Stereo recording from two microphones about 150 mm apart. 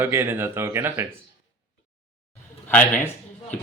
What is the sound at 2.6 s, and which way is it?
Speech, 10° left (ahead or behind).